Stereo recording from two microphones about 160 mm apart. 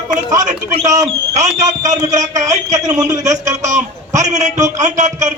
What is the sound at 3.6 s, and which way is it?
A man's voice, 50° right (ahead or behind).